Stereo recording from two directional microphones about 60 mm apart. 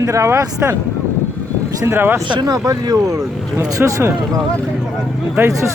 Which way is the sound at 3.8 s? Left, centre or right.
Right.